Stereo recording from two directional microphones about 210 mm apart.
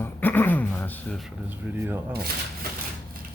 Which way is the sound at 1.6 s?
10° right (ahead or behind).